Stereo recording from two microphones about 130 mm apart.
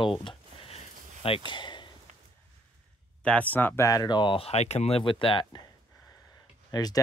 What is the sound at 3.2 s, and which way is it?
Speech, 10° left (ahead or behind).